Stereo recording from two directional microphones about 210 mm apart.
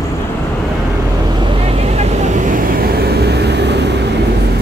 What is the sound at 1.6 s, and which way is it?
Vehicle, 30° right (ahead or behind).